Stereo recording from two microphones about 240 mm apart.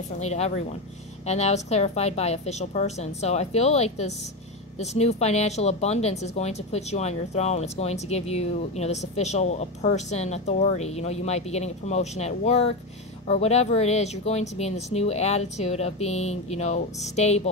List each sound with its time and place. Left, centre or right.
0.2 s speech: left